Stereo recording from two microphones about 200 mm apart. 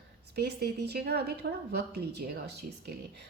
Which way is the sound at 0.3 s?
55° right (ahead or behind).